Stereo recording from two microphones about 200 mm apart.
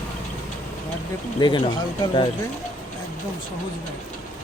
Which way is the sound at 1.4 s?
20° left (ahead or behind).